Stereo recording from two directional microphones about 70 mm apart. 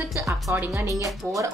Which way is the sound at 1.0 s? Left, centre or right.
Right.